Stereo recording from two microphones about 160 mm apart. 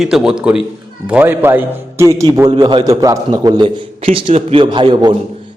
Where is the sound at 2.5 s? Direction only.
30° right (ahead or behind).